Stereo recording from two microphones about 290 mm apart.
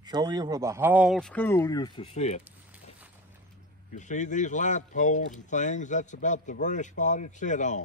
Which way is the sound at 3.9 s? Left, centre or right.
Left.